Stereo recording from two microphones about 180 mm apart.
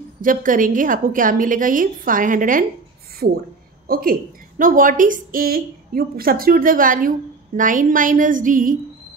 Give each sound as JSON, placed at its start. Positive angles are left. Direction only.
{"t": 0.2, "sound": "a woman's voice", "side_deg": -50}
{"t": 3.8, "sound": "a woman's voice", "side_deg": -55}